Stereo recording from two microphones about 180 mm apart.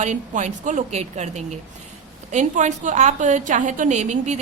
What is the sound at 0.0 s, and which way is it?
A woman's voice, 40° right (ahead or behind).